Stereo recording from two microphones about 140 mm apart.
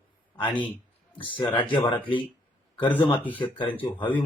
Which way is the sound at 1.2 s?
35° left (ahead or behind).